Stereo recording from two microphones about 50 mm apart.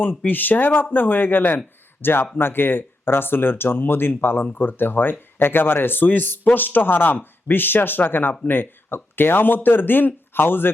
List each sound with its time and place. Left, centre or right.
0.3 s a man's voice: left